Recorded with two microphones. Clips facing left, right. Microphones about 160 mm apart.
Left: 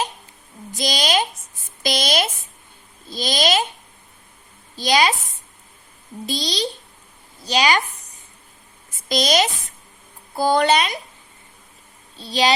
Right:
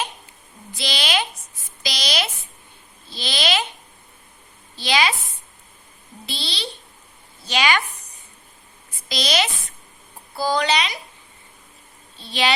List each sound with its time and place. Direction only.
0.7 s a woman's voice: 45° left (ahead or behind)
4.8 s speech: 40° left (ahead or behind)
6.2 s a woman's voice: 40° left (ahead or behind)
8.9 s a sound: 45° left (ahead or behind)
10.3 s speech: 50° left (ahead or behind)
12.1 s a woman's voice: 40° left (ahead or behind)